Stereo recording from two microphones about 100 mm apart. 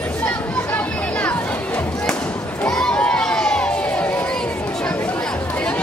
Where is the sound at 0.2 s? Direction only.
15° left (ahead or behind).